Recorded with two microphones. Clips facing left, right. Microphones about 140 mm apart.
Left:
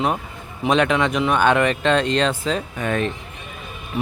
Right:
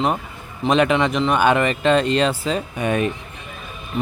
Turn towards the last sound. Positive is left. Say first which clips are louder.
# right 2 dB
turn(degrees=-15)  # may be behind; listen again after turning